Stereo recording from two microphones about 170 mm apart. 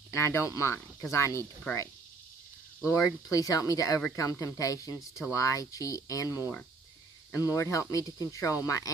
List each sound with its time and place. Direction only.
0.1 s speech: 15° left (ahead or behind)
3.3 s speech: 20° left (ahead or behind)